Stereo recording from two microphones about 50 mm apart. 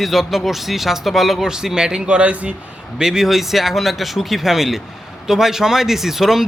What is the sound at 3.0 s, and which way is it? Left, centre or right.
A man's voice, centre.